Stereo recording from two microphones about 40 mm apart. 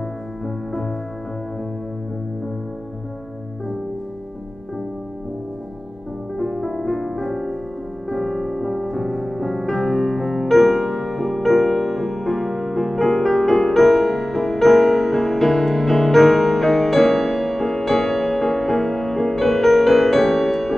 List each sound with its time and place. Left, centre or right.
6.3 s music: centre